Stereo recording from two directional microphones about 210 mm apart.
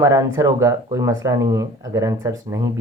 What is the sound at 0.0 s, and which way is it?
Speech, 15° right (ahead or behind).